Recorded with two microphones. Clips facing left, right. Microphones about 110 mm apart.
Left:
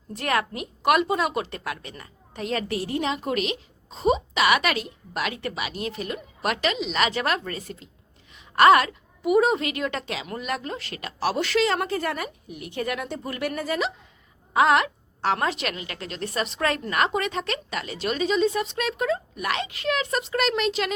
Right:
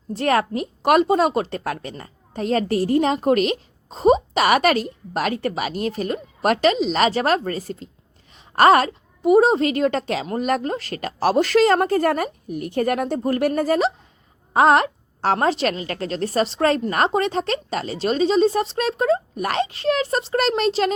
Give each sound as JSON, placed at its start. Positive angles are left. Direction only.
{"t": 0.1, "sound": "a woman's voice", "side_deg": -35}